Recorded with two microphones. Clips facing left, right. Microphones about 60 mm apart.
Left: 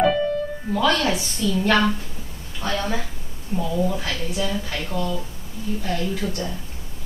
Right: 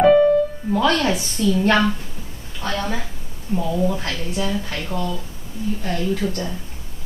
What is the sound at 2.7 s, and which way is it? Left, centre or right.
A woman's voice, centre.